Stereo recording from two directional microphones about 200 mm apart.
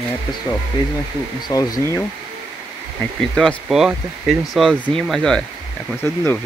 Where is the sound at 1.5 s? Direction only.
20° left (ahead or behind).